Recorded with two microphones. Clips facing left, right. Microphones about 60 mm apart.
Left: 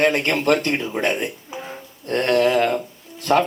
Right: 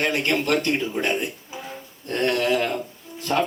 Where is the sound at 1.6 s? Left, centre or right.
Left.